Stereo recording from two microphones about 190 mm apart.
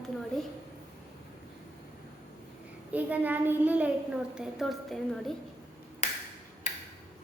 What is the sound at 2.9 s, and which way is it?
A child's voice, 10° right (ahead or behind).